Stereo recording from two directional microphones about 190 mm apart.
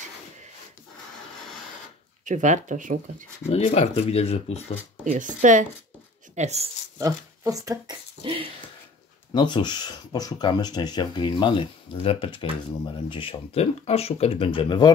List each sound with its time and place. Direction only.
2.2 s speech: 40° right (ahead or behind)
3.4 s speech: 35° left (ahead or behind)
5.0 s speech: 40° right (ahead or behind)
7.0 s speech: 20° right (ahead or behind)
9.3 s speech: 25° left (ahead or behind)